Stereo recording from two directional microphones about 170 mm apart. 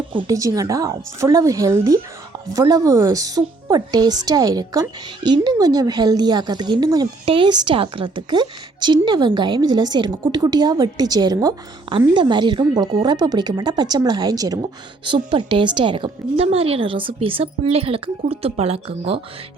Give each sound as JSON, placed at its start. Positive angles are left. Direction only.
{"t": 0.1, "sound": "speech", "side_deg": -25}